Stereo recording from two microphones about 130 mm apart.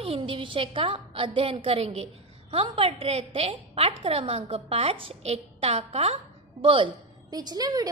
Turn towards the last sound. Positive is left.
turn(degrees=-30)  # may be behind; listen again after turning